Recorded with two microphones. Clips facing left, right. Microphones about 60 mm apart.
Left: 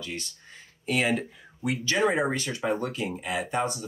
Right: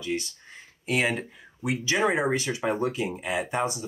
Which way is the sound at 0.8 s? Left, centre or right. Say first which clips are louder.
Even; centre.